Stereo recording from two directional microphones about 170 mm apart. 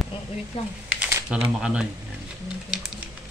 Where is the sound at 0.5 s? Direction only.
30° left (ahead or behind).